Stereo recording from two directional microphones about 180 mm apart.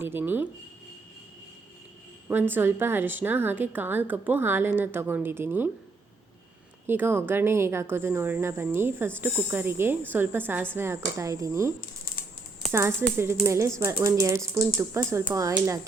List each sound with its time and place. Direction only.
0.0 s a woman's voice: 10° right (ahead or behind)
2.2 s a woman's voice: 10° right (ahead or behind)
6.8 s a woman's voice: 10° right (ahead or behind)
12.7 s a woman's voice: 15° right (ahead or behind)